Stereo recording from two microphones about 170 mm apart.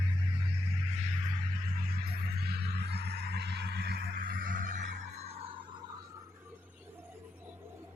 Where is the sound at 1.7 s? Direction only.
60° right (ahead or behind); by 5.5 s 35° right (ahead or behind).